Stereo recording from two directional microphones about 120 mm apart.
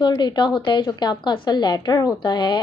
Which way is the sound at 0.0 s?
35° left (ahead or behind).